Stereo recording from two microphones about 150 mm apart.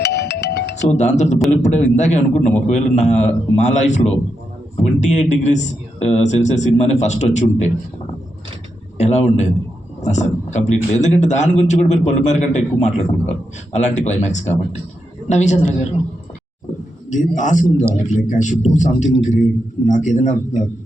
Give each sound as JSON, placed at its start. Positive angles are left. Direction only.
{"t": 0.0, "sound": "music", "side_deg": 90}
{"t": 0.8, "sound": "a man's voice", "side_deg": 50}
{"t": 9.0, "sound": "a man's voice", "side_deg": 50}
{"t": 17.1, "sound": "speech", "side_deg": 55}